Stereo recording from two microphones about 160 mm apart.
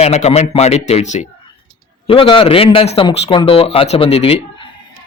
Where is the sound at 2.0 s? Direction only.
35° left (ahead or behind).